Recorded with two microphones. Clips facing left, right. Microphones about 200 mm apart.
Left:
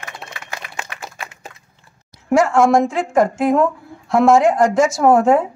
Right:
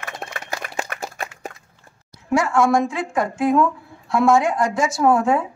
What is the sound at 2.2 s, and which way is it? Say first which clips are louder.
A woman's voice: left 4 dB; 45° left (ahead or behind).